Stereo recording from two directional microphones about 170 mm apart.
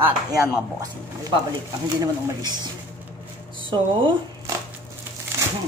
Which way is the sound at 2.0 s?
25° right (ahead or behind).